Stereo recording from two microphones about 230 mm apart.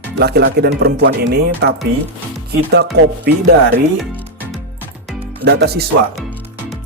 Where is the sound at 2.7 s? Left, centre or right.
Right.